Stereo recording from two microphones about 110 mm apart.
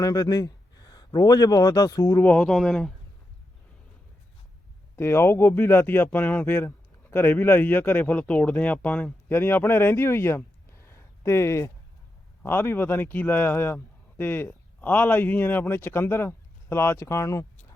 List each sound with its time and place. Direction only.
0.0 s speech: 30° left (ahead or behind)
2.2 s speech: 10° left (ahead or behind)
4.9 s speech: 20° left (ahead or behind)
10.8 s a sound: 25° left (ahead or behind)
12.4 s speech: 20° left (ahead or behind)